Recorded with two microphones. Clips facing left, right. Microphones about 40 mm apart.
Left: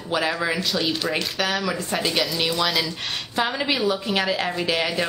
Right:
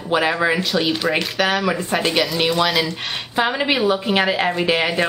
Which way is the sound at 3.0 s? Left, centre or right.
Centre.